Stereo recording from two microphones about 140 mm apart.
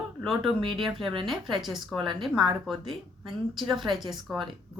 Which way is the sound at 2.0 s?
35° right (ahead or behind).